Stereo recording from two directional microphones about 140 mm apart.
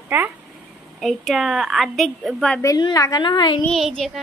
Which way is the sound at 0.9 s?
Centre (ahead or behind).